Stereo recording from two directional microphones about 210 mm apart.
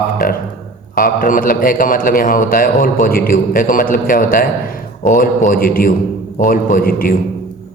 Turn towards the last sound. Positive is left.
turn(degrees=45)  # may be behind; listen again after turning